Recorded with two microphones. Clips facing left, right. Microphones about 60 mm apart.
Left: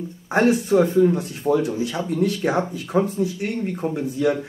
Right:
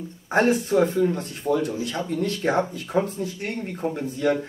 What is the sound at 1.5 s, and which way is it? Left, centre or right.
Speech, centre.